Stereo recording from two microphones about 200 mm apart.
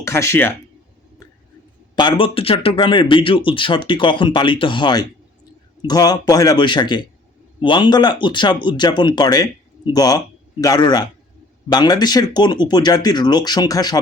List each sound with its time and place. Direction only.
0.0 s speech: 15° left (ahead or behind)
2.0 s speech: 25° left (ahead or behind)